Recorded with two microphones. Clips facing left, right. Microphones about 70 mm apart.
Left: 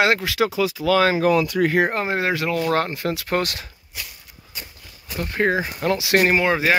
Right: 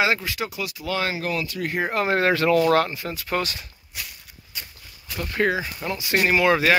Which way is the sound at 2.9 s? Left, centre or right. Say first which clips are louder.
Left 6 dB; left.